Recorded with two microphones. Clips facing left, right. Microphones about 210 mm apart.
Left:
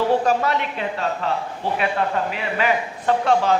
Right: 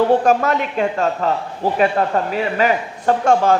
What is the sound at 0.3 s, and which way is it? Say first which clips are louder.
Speech: right 4 dB; 45° right (ahead or behind).